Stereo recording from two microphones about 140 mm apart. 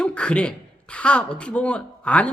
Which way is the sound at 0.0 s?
10° left (ahead or behind).